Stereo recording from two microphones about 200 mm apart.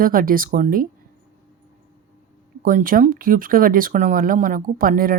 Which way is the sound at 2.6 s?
45° right (ahead or behind).